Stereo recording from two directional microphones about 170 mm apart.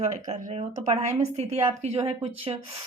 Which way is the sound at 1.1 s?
40° right (ahead or behind).